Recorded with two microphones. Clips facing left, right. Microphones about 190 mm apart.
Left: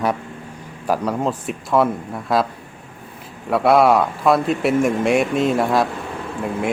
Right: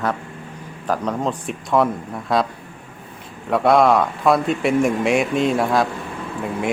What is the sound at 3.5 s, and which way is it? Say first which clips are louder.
Speech: left 1 dB; 5° left (ahead or behind).